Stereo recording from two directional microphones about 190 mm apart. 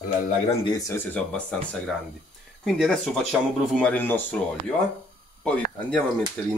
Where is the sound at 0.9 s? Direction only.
5° left (ahead or behind).